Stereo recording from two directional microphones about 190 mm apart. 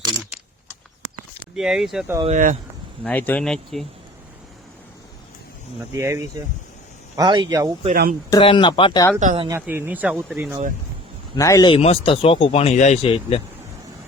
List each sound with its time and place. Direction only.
1.5 s speech: 5° right (ahead or behind)
2.2 s speech: 40° right (ahead or behind)
3.0 s speech: 10° left (ahead or behind)
5.9 s speech: 15° right (ahead or behind)
8.3 s speech: 25° left (ahead or behind)
9.2 s speech: 30° right (ahead or behind)
9.5 s speech: 10° right (ahead or behind)
11.3 s a man's voice: 15° left (ahead or behind)
11.8 s speech: 30° left (ahead or behind)